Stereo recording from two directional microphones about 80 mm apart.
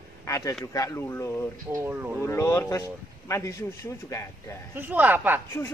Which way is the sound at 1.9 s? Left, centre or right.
Right.